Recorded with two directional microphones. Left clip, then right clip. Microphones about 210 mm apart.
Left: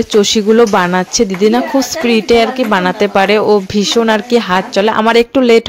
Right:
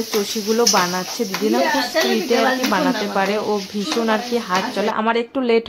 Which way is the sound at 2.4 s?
35° left (ahead or behind).